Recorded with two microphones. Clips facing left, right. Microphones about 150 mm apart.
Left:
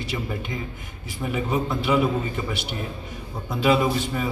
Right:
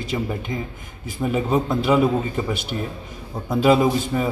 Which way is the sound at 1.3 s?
45° right (ahead or behind).